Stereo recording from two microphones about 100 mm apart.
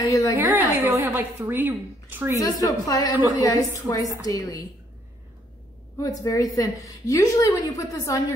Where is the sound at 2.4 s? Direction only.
40° left (ahead or behind).